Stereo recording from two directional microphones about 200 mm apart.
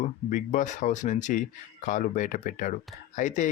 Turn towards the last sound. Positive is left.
turn(degrees=40)  # may be behind; listen again after turning